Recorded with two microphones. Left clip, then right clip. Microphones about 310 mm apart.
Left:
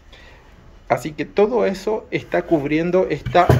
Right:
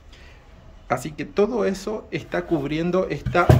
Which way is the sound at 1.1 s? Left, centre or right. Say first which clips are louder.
Left 4 dB; centre.